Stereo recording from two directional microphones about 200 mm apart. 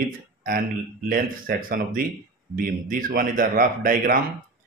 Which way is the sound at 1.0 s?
45° right (ahead or behind).